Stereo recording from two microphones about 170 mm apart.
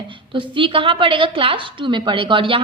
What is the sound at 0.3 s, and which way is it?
A woman's voice, 30° right (ahead or behind).